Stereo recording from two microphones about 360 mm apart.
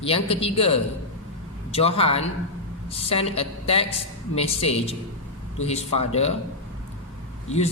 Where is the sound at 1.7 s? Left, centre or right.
Centre.